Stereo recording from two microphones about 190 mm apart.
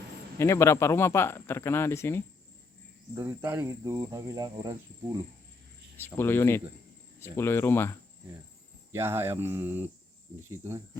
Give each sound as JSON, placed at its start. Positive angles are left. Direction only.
{"t": 0.3, "sound": "speech", "side_deg": 15}
{"t": 3.2, "sound": "speech", "side_deg": -10}
{"t": 6.1, "sound": "speech", "side_deg": 15}
{"t": 9.0, "sound": "speech", "side_deg": -10}